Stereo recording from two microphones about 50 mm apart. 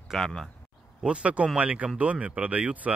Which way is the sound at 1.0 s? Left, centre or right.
Right.